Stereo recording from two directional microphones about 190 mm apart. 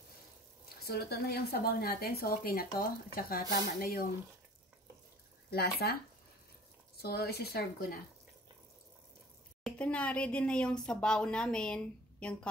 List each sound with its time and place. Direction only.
0.8 s a woman's voice: 55° left (ahead or behind)
5.5 s a woman's voice: 55° left (ahead or behind)
7.0 s a woman's voice: 55° left (ahead or behind)
9.6 s speech: 5° left (ahead or behind)